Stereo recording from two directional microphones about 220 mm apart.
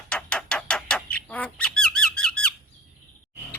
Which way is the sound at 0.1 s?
5° left (ahead or behind).